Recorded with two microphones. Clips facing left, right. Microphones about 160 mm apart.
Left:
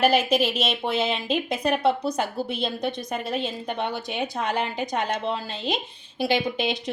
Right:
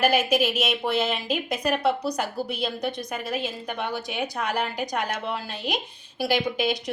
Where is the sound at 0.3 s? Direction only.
10° right (ahead or behind).